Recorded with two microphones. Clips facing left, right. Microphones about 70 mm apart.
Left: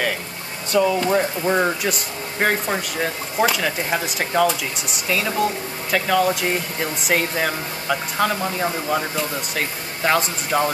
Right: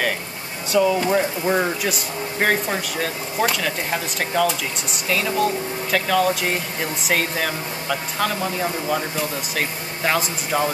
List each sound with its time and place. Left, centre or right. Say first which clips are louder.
0.7 s speech: even; centre
1.1 s speech: left 1 dB; centre
5.1 s speech: right 1 dB; centre
9.6 s speech: right 1 dB; centre